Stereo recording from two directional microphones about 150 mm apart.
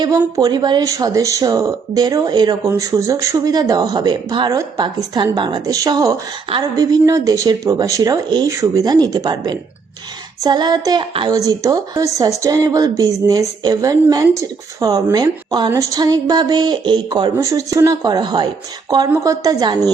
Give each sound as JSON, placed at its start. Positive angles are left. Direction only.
{"t": 0.0, "sound": "speech", "side_deg": -25}